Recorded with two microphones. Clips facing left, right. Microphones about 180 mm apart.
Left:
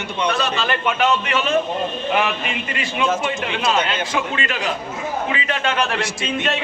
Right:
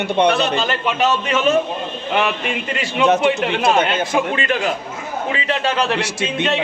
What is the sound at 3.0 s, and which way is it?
Speech, 65° right (ahead or behind).